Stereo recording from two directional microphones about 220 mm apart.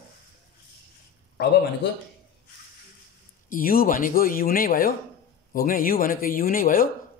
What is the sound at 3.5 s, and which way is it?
Speech, 40° left (ahead or behind).